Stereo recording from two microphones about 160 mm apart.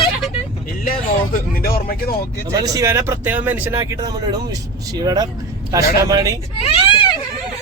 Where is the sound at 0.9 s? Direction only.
60° left (ahead or behind).